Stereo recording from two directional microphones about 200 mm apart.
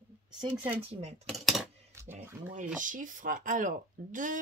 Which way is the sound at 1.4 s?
Centre (ahead or behind).